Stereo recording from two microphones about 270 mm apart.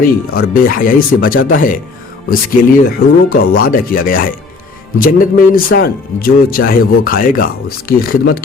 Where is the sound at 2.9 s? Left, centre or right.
Left.